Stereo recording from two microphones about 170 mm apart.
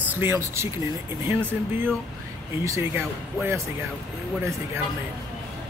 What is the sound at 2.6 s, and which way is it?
Speech, 15° right (ahead or behind).